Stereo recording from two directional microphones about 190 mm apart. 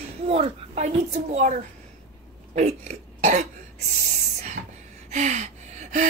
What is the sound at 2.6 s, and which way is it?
Cough, 40° right (ahead or behind).